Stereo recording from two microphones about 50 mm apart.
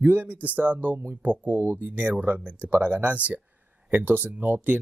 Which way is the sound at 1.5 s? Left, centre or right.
Right.